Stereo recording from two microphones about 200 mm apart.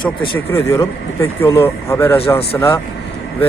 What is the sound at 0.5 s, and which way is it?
Speech, 15° left (ahead or behind).